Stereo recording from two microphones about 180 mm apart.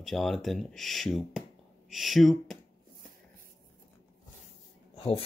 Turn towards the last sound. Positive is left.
turn(degrees=30)  # may be behind; listen again after turning